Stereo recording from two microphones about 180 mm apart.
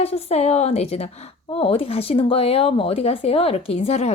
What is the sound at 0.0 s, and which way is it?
Speech, 35° left (ahead or behind).